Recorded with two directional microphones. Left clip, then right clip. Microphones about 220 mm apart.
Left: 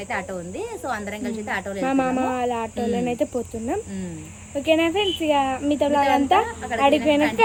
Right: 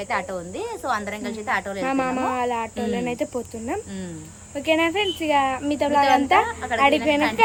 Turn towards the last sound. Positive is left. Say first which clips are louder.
# left 1 dB
turn(degrees=-5)  # may be behind; listen again after turning